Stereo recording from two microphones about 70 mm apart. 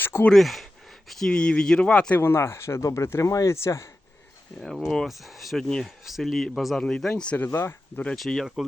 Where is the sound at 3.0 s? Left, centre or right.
Left.